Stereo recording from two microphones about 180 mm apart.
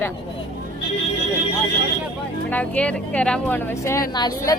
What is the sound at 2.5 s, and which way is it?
Speech, 5° left (ahead or behind).